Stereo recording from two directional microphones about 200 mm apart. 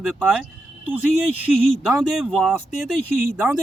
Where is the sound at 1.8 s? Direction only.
Centre (ahead or behind).